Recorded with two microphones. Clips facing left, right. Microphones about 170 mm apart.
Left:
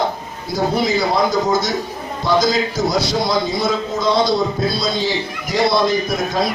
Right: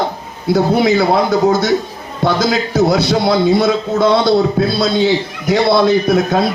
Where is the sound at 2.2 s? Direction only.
60° right (ahead or behind).